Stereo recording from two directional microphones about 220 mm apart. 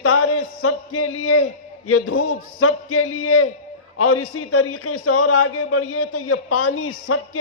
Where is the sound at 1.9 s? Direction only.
80° left.